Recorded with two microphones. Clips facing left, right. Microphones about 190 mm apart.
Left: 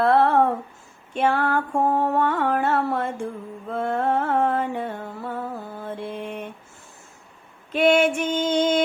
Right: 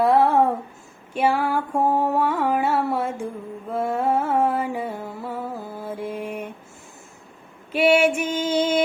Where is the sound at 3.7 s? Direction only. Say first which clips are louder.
Right 1 dB; 5° right (ahead or behind).